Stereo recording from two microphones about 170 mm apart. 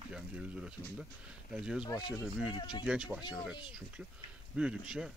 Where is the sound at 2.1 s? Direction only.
5° right (ahead or behind).